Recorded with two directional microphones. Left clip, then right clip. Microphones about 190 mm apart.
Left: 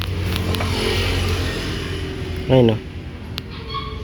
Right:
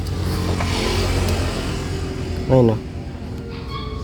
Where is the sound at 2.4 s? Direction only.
5° left (ahead or behind).